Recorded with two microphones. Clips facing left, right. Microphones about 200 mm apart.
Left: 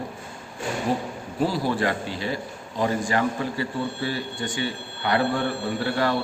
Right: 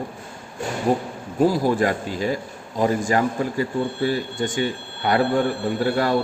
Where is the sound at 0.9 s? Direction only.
50° right (ahead or behind).